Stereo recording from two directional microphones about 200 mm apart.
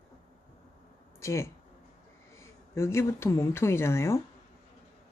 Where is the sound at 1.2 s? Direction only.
15° left (ahead or behind).